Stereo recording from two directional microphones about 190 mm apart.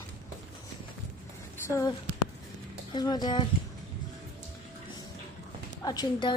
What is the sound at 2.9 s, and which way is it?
Speech, 20° left (ahead or behind).